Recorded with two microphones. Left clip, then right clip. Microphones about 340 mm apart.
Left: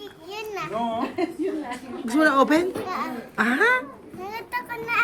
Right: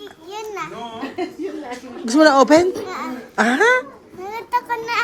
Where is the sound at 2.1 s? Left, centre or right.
Centre.